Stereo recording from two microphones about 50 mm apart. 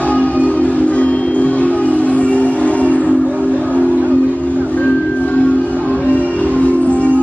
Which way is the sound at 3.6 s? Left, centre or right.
Left.